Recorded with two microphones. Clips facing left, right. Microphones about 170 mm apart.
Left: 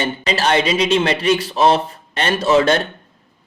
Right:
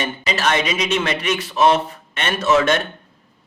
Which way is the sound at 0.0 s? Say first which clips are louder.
Left 2 dB; 35° left (ahead or behind).